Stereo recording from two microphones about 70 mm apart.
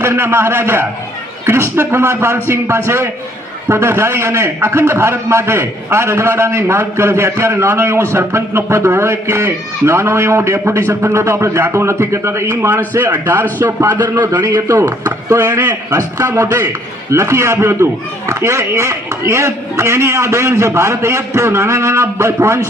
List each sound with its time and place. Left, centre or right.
0.0 s a man's voice: right
14.7 s a man's voice: right
15.5 s a man's voice: right